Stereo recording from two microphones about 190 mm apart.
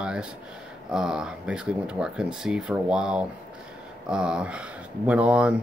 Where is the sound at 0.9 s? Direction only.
5° right (ahead or behind).